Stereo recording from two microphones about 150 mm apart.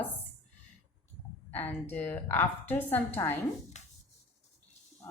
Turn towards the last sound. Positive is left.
turn(degrees=50)  # may be behind; listen again after turning